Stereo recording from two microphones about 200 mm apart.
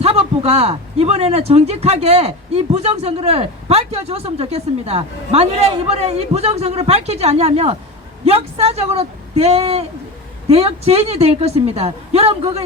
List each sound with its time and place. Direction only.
0.0 s a man's voice: 30° right (ahead or behind)